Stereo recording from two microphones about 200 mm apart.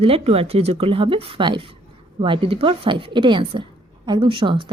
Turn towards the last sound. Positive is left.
turn(degrees=-25)  # may be behind; listen again after turning